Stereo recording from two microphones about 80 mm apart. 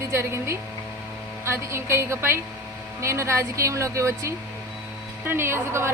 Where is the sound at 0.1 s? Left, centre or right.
Right.